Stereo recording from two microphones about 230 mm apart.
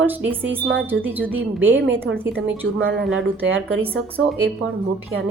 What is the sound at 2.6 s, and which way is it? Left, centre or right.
Speech, right.